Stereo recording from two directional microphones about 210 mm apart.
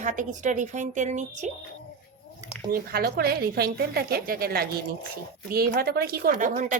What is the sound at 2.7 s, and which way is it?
A woman's voice, 50° right (ahead or behind).